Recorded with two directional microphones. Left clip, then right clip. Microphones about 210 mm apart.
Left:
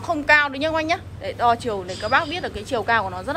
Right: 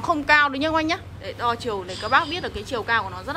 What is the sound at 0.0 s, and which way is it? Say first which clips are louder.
Speech: left 1 dB; 10° right (ahead or behind).